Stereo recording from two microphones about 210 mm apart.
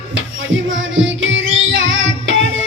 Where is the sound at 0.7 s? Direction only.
65° right (ahead or behind).